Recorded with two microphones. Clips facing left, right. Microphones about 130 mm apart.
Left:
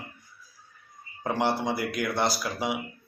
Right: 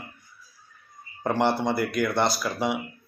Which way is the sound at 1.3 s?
5° left (ahead or behind).